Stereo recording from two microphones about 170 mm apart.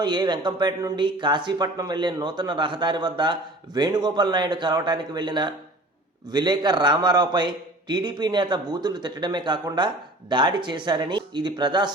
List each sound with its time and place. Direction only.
0.0 s a man's voice: 25° right (ahead or behind)